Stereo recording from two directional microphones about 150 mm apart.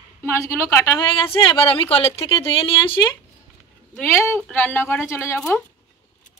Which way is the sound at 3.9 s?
15° left (ahead or behind).